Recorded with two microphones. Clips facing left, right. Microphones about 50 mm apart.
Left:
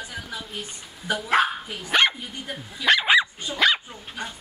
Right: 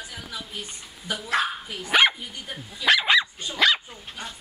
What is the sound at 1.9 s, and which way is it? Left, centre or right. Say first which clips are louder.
Dog: right 1 dB; centre.